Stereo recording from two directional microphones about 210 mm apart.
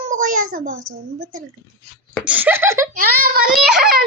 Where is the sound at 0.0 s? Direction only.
35° right (ahead or behind).